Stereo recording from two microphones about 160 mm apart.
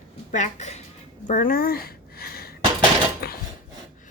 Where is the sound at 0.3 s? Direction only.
45° left (ahead or behind).